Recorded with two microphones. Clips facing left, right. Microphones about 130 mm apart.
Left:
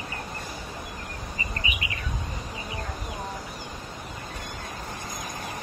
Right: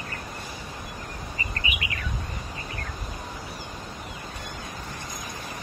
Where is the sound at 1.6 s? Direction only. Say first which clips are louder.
Right 1 dB; 25° left (ahead or behind).